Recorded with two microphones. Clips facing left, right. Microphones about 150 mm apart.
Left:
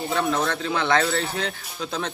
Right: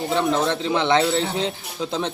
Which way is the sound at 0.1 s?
20° right (ahead or behind).